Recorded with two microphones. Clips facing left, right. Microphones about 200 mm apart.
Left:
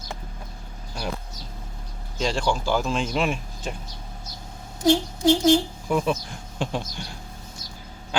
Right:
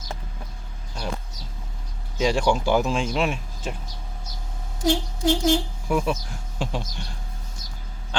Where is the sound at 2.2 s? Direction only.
10° right (ahead or behind).